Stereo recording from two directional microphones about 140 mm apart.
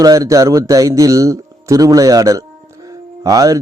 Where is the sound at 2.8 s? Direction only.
25° right (ahead or behind).